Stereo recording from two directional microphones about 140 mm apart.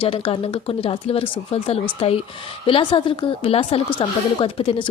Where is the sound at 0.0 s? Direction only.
40° left (ahead or behind).